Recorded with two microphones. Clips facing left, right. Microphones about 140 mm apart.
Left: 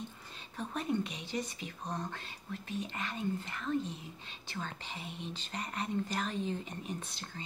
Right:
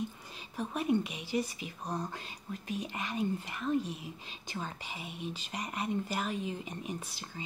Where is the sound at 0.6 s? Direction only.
10° right (ahead or behind).